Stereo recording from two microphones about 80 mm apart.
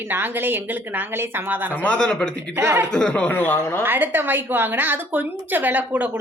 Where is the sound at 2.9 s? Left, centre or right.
Centre.